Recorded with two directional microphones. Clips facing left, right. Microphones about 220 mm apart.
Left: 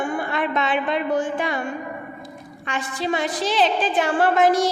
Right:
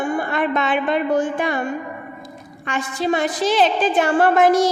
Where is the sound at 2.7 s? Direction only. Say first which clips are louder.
Right 4 dB; 50° right (ahead or behind).